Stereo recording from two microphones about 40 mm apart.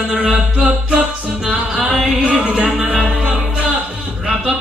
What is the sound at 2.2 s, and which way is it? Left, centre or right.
Speech, right.